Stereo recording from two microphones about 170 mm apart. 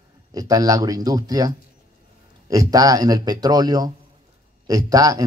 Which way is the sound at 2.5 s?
20° right (ahead or behind).